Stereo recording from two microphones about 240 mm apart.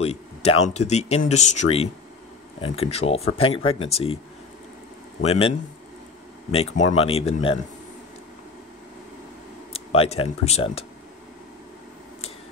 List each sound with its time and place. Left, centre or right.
0.0 s a sound: left
0.7 s speech: left
5.2 s speech: left
6.5 s speech: left
9.7 s speech: left